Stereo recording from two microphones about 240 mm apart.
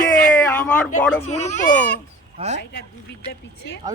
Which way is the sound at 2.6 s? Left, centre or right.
Left.